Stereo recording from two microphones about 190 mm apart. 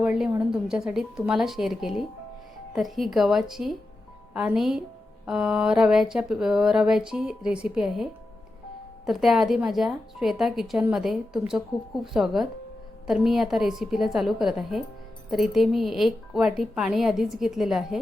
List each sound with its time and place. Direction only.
0.0 s speech: 5° right (ahead or behind)
9.0 s speech: centre (ahead or behind)